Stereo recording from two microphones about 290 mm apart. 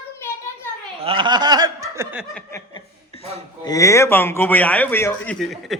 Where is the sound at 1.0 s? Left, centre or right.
Centre.